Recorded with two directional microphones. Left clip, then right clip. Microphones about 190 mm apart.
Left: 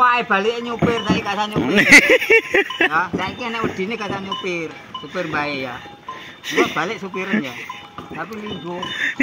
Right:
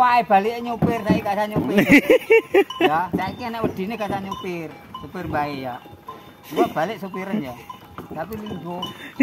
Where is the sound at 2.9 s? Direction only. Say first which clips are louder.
Left 2 dB; 40° right (ahead or behind).